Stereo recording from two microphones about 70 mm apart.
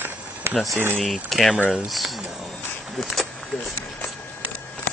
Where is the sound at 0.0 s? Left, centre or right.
Right.